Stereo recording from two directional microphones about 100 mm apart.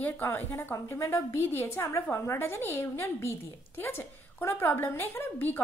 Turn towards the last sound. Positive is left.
turn(degrees=20)  # may be behind; listen again after turning